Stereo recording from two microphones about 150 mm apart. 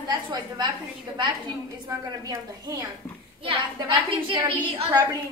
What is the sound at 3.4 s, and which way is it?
A woman's voice, 35° right (ahead or behind).